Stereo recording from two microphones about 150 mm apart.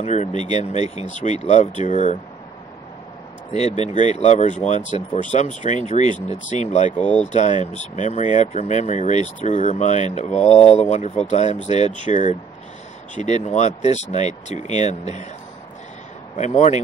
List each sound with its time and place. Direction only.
0.0 s speech: 50° left (ahead or behind)
3.5 s speech: 50° left (ahead or behind)
16.3 s speech: 50° left (ahead or behind)